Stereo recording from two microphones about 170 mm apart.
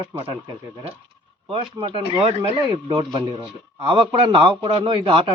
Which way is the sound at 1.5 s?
30° right (ahead or behind).